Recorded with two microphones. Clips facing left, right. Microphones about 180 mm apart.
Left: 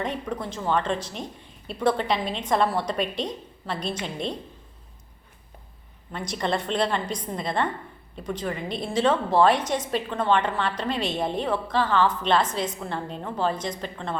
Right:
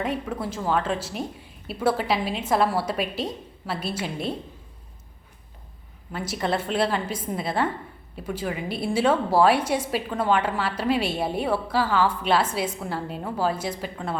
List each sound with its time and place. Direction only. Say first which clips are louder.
0.0 s a woman's voice: right 2 dB; 5° right (ahead or behind)
6.1 s a woman's voice: right 1 dB; 5° right (ahead or behind)